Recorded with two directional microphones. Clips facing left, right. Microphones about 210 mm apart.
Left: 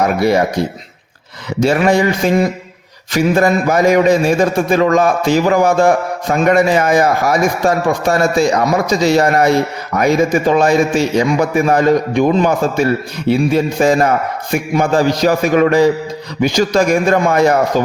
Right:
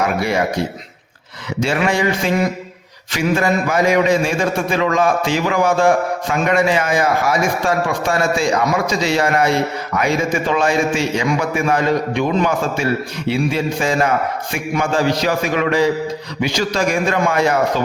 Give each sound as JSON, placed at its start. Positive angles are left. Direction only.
{"t": 0.2, "sound": "a man's voice", "side_deg": 40}
{"t": 1.6, "sound": "a man's voice", "side_deg": 40}